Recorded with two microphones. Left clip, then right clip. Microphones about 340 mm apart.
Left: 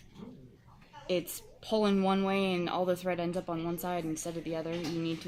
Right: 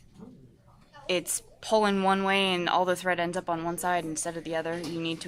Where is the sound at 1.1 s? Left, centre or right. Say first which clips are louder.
Right 4 dB; right.